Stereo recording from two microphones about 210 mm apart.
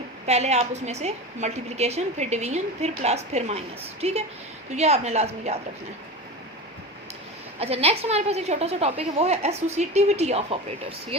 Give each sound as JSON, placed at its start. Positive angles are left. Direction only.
{"t": 0.3, "sound": "a woman's voice", "side_deg": -30}
{"t": 7.6, "sound": "a woman's voice", "side_deg": -30}